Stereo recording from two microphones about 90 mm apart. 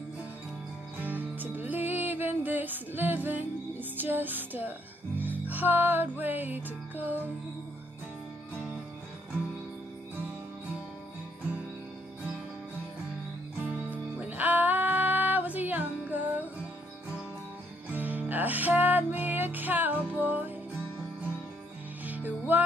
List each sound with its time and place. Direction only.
1.0 s music: 20° right (ahead or behind)
13.7 s music: 15° right (ahead or behind)
17.9 s music: 20° right (ahead or behind)
22.0 s music: 20° right (ahead or behind)